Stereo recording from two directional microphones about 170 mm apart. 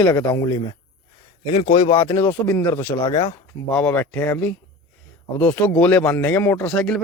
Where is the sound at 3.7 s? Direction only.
5° left (ahead or behind).